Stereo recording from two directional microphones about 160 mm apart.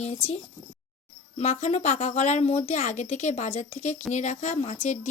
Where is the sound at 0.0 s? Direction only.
40° left (ahead or behind).